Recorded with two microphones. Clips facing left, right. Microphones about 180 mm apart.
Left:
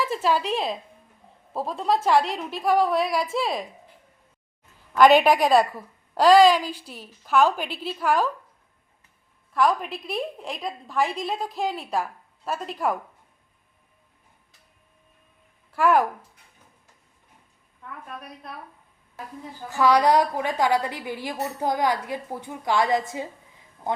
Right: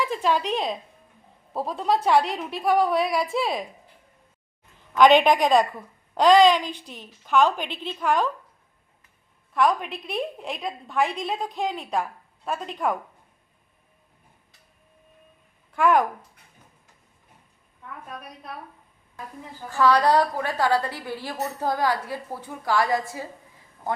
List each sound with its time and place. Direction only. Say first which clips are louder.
0.0 s a woman's voice: even; 5° left (ahead or behind)
4.9 s a woman's voice: even; 5° left (ahead or behind)
9.5 s a woman's voice: even; centre (ahead or behind)
15.7 s a woman's voice: even; 5° left (ahead or behind)
19.7 s a woman's voice: even; 15° left (ahead or behind)